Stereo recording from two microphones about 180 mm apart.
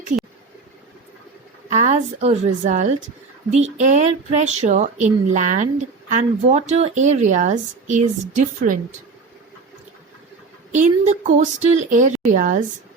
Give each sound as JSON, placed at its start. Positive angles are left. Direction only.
{"t": 1.7, "sound": "speech", "side_deg": -40}
{"t": 10.7, "sound": "speech", "side_deg": -45}